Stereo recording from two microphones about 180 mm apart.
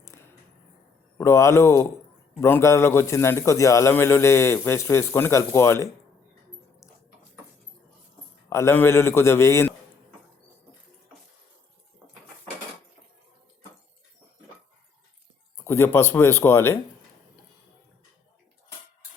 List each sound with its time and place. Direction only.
0.1 s a sound: 15° left (ahead or behind)
1.2 s a man's voice: 15° left (ahead or behind)
8.4 s a man's voice: 15° left (ahead or behind)
15.5 s a man's voice: 15° left (ahead or behind)